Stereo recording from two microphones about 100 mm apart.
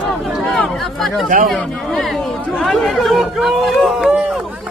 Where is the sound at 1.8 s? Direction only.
Centre (ahead or behind).